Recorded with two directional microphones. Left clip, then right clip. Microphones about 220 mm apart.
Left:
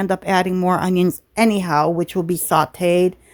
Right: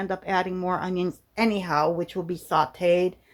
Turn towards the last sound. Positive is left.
turn(degrees=45)  # may be behind; listen again after turning